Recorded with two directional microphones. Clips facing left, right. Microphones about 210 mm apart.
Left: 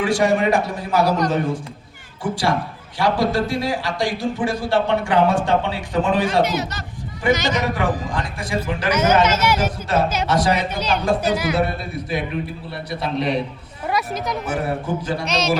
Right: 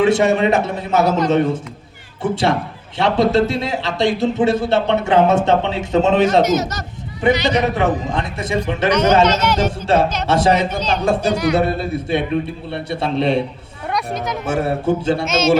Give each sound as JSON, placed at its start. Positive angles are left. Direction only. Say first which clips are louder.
{"t": 0.0, "sound": "speech", "louder": "right 4 dB", "side_deg": -25}
{"t": 2.3, "sound": "speech", "louder": "right 3 dB", "side_deg": -25}
{"t": 6.4, "sound": "speech", "louder": "right 4 dB", "side_deg": -45}
{"t": 7.5, "sound": "speech", "louder": "right 4 dB", "side_deg": -25}
{"t": 8.9, "sound": "speech", "louder": "right 3 dB", "side_deg": 5}
{"t": 9.6, "sound": "speech", "louder": "right 4 dB", "side_deg": -25}
{"t": 11.3, "sound": "speech", "louder": "right 3 dB", "side_deg": 5}
{"t": 11.6, "sound": "speech", "louder": "right 5 dB", "side_deg": -30}
{"t": 13.8, "sound": "speech", "louder": "right 1 dB", "side_deg": 0}
{"t": 14.4, "sound": "speech", "louder": "right 9 dB", "side_deg": -25}
{"t": 15.2, "sound": "speech", "louder": "right 5 dB", "side_deg": 0}